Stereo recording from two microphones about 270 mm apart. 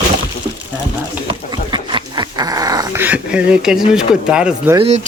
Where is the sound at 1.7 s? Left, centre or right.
Centre.